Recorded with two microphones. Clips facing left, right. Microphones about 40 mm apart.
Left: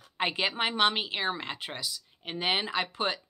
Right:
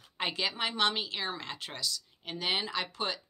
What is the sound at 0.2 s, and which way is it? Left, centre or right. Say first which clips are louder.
A woman's voice: left 4 dB; left.